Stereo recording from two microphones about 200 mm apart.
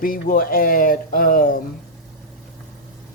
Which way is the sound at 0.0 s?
45° left (ahead or behind).